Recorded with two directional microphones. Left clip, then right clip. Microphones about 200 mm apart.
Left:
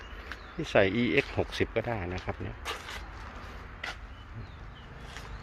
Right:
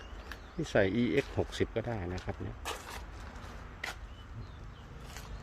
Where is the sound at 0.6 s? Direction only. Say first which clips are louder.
Left 4 dB; 15° right (ahead or behind).